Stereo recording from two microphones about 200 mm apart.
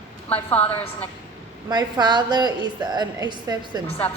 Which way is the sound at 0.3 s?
10° left (ahead or behind).